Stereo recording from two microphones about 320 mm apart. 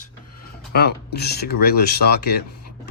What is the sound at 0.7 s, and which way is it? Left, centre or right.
Speech, left.